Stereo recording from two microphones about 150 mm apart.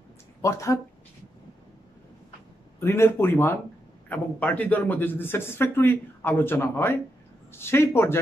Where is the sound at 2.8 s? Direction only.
15° left (ahead or behind).